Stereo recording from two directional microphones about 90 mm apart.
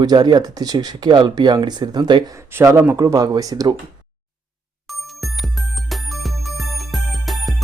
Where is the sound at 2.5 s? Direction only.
35° right (ahead or behind).